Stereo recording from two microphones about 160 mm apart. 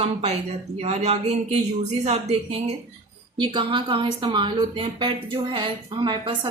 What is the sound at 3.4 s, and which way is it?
A woman's voice, 30° right (ahead or behind).